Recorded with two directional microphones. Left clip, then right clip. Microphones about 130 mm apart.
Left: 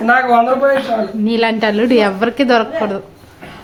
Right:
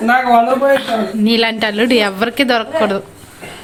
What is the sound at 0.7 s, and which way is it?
A woman's voice, centre (ahead or behind).